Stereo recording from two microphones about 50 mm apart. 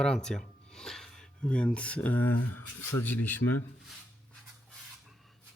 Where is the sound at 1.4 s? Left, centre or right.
Centre; by 3.3 s left.